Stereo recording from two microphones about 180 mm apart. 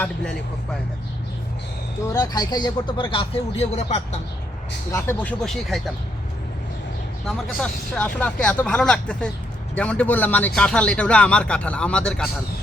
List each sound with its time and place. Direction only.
0.0 s speech: 5° left (ahead or behind)
2.1 s speech: 20° left (ahead or behind); by 4.2 s 40° left (ahead or behind)
4.9 s speech: 15° left (ahead or behind)
5.4 s speech: centre (ahead or behind)
7.3 s speech: 5° left (ahead or behind)